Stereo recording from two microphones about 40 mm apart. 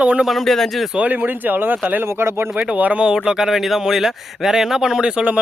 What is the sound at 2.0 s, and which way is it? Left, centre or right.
Speech, right.